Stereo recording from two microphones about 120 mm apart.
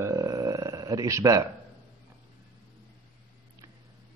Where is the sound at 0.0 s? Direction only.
30° right (ahead or behind).